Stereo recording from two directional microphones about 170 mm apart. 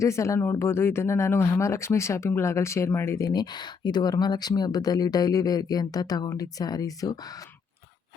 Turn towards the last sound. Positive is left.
turn(degrees=20)  # may be behind; listen again after turning